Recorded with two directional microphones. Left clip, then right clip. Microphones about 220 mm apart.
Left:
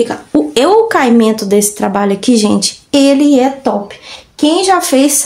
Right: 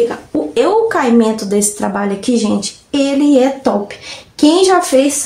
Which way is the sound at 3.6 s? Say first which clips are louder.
Left 1 dB; 5° left (ahead or behind).